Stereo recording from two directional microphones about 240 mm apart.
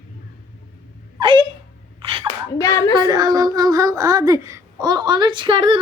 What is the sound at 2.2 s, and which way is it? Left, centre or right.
Speech, centre.